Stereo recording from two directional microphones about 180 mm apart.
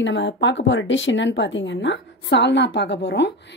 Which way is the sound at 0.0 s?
85° left.